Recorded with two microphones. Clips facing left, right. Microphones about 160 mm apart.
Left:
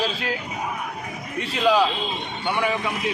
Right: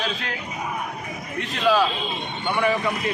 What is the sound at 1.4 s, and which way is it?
Speech, 10° left (ahead or behind).